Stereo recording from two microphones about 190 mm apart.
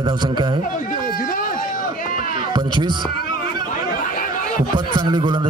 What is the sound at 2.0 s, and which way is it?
Run, 45° left (ahead or behind).